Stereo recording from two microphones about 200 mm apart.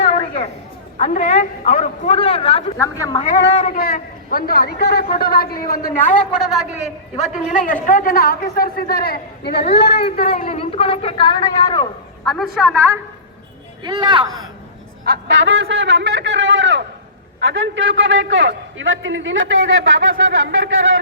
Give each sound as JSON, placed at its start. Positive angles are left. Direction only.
{"t": 0.0, "sound": "a sound", "side_deg": 30}
{"t": 0.9, "sound": "a man's voice", "side_deg": 35}
{"t": 2.7, "sound": "a woman's voice", "side_deg": 15}
{"t": 3.2, "sound": "a man's voice", "side_deg": 35}
{"t": 3.8, "sound": "a man's voice", "side_deg": 45}
{"t": 6.1, "sound": "a woman's voice", "side_deg": 0}
{"t": 7.2, "sound": "a man's voice", "side_deg": 40}
{"t": 10.3, "sound": "a man's voice", "side_deg": 40}
{"t": 10.6, "sound": "a woman's voice", "side_deg": 30}
{"t": 12.2, "sound": "a woman's voice", "side_deg": 0}
{"t": 13.8, "sound": "speech", "side_deg": -20}
{"t": 15.0, "sound": "a man's voice", "side_deg": -60}